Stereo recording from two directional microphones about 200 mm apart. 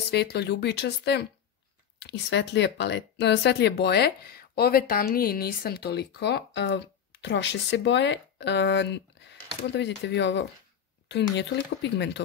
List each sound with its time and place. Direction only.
0.1 s speech: 55° left (ahead or behind)